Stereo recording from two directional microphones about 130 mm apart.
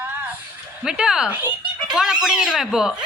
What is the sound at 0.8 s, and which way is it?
A woman's voice, 5° right (ahead or behind).